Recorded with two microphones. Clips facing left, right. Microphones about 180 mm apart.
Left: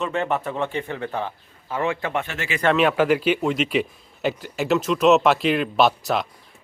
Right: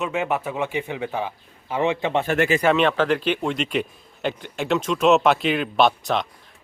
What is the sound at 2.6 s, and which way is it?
Speech, centre (ahead or behind).